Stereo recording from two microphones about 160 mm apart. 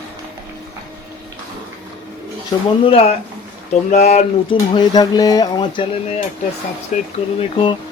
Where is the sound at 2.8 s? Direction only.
35° left (ahead or behind).